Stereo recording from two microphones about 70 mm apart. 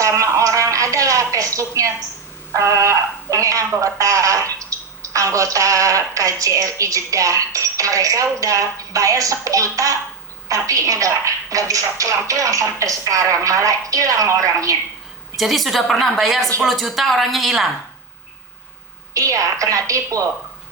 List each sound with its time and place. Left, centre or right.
0.0 s a sound: right
2.5 s speech: right
15.4 s a woman's voice: centre
19.1 s speech: right